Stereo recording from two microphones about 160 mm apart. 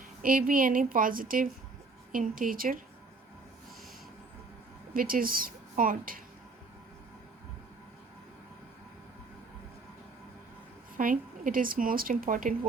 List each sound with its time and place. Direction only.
0.2 s speech: 60° right (ahead or behind)
4.9 s speech: 60° right (ahead or behind)
10.9 s speech: 55° right (ahead or behind)